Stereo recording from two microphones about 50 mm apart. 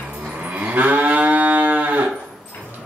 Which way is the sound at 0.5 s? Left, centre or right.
Right.